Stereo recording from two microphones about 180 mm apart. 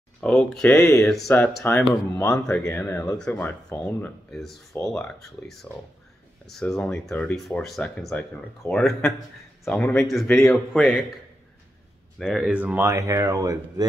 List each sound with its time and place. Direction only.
0.2 s speech: 5° left (ahead or behind)
6.4 s speech: centre (ahead or behind)
12.2 s speech: 5° right (ahead or behind)